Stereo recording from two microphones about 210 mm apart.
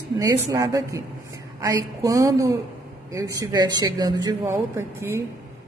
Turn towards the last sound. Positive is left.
turn(degrees=-10)  # may be behind; listen again after turning